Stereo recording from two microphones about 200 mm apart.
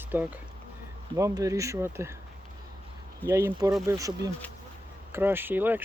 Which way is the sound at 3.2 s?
15° right (ahead or behind).